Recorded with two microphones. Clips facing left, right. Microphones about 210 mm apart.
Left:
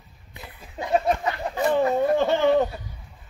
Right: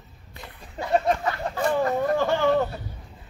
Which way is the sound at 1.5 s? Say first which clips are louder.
Left 3 dB; 20° left (ahead or behind).